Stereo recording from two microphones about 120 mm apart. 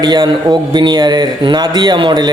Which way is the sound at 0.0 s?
40° right (ahead or behind).